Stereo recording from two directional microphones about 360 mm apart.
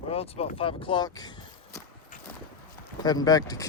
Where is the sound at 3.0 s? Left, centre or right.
Centre.